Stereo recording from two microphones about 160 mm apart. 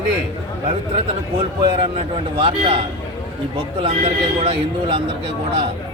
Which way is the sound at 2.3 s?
35° right (ahead or behind).